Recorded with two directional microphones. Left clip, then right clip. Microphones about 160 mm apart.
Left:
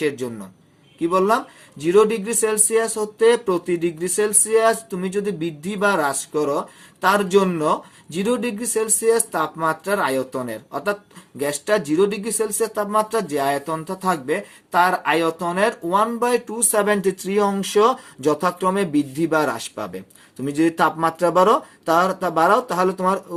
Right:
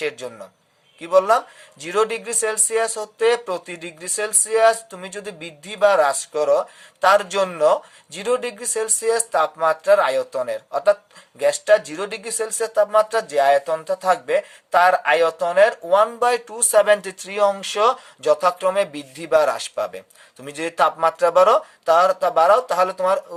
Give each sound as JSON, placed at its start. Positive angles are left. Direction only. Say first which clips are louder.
{"t": 0.0, "sound": "speech", "louder": "left 3 dB", "side_deg": -25}